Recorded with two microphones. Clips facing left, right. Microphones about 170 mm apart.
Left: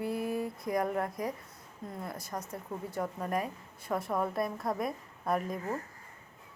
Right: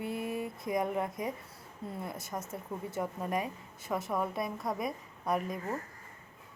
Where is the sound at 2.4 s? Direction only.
25° right (ahead or behind).